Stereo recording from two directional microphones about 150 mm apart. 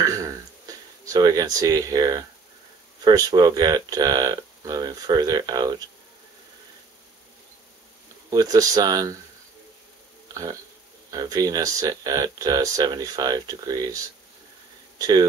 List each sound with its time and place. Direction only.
0.0 s a sound: 25° right (ahead or behind)
3.0 s speech: 25° right (ahead or behind)
8.3 s speech: 25° right (ahead or behind)
10.3 s speech: 20° right (ahead or behind)